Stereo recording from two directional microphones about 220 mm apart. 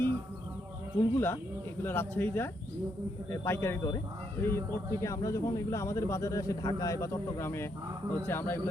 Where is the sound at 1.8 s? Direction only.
10° left (ahead or behind).